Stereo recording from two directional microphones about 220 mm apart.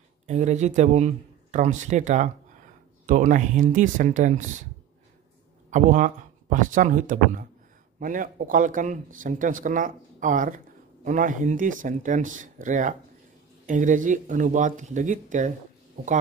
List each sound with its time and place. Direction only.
0.3 s speech: 30° right (ahead or behind)
5.7 s speech: 35° right (ahead or behind)